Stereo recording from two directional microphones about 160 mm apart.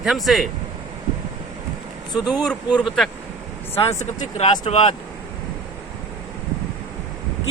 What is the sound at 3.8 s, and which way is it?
Speech, 45° left (ahead or behind).